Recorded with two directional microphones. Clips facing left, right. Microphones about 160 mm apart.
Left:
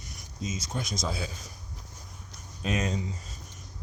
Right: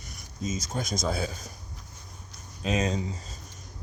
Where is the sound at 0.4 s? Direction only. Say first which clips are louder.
Right 3 dB; 45° right (ahead or behind).